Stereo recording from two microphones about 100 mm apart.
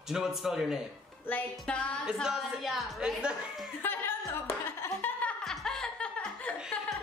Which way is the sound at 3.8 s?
20° left (ahead or behind).